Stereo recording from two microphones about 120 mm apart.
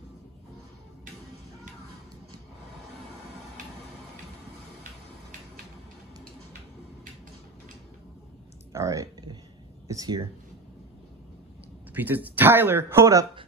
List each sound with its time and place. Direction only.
8.7 s typing: 30° right (ahead or behind)
9.8 s speech: 30° right (ahead or behind)
11.9 s speech: 15° right (ahead or behind)